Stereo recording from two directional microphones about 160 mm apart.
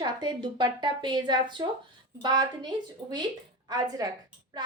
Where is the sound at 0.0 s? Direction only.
25° right (ahead or behind).